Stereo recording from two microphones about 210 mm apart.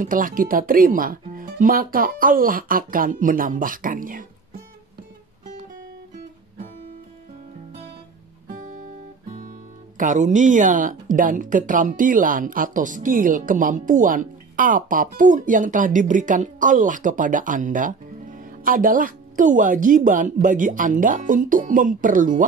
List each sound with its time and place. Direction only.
0.0 s speech: 40° right (ahead or behind)
9.9 s speech: 40° right (ahead or behind)